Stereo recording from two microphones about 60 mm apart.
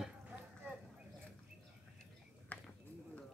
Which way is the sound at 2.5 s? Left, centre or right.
Left.